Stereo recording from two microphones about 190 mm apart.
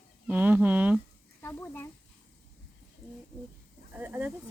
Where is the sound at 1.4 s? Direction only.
10° left (ahead or behind).